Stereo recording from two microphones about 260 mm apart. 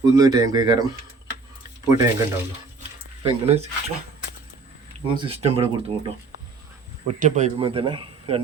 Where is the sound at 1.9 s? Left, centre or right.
Centre.